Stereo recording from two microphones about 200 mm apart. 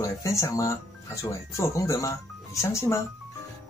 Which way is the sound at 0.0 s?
15° left (ahead or behind).